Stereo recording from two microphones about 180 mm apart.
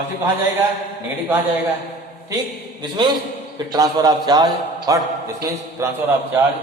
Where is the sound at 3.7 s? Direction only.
20° right (ahead or behind).